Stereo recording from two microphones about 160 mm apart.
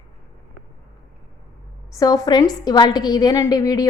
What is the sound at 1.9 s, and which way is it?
A woman's voice, 20° left (ahead or behind).